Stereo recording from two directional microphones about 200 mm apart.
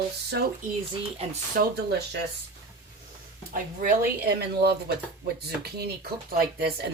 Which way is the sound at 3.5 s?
45° right (ahead or behind).